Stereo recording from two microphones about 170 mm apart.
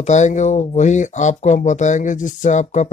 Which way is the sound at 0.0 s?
45° left (ahead or behind).